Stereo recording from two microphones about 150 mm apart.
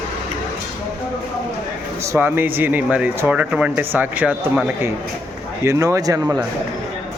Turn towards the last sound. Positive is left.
turn(degrees=-25)  # may be behind; listen again after turning